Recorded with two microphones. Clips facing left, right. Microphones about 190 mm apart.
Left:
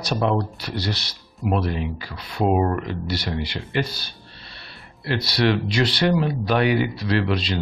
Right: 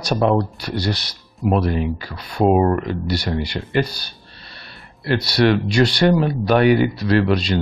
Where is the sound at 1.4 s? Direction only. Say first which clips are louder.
Right 5 dB; 50° right (ahead or behind).